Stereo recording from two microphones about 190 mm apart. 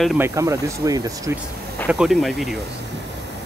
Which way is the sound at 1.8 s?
5° right (ahead or behind).